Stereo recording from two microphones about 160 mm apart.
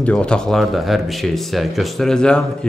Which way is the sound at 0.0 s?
5° left (ahead or behind).